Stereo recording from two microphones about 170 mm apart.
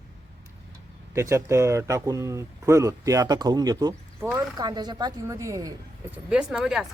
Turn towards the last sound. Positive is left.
turn(degrees=-5)  # may be behind; listen again after turning